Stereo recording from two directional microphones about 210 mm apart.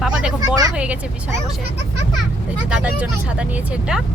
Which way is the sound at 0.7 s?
5° right (ahead or behind).